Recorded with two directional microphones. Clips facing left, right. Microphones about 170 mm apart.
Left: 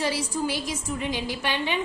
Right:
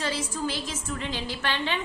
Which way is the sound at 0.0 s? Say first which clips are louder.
Left 3 dB; 15° left (ahead or behind).